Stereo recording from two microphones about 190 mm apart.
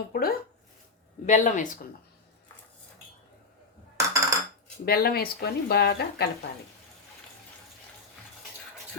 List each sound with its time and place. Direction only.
0.1 s speech: 50° left (ahead or behind)
1.3 s speech: 40° left (ahead or behind)
3.9 s dishes: 15° right (ahead or behind)
4.9 s speech: 55° left (ahead or behind)